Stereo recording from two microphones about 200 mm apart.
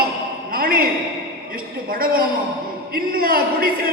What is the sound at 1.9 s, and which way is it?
A man's voice, 45° right (ahead or behind).